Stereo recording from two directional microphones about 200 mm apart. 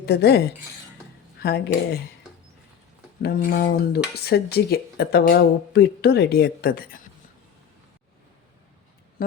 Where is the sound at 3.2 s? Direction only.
45° left (ahead or behind).